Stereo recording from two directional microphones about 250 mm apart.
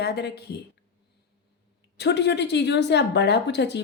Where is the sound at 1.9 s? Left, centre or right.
Left.